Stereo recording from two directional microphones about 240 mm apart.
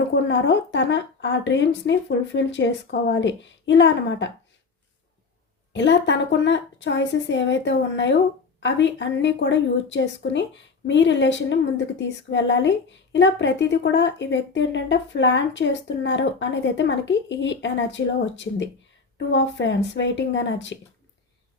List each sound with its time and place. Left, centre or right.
0.1 s speech: left
5.7 s speech: left